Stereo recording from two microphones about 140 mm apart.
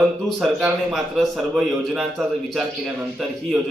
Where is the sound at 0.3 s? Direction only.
5° right (ahead or behind).